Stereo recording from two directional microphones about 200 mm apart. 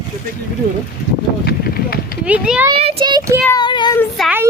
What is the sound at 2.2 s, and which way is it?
Speech, 5° right (ahead or behind).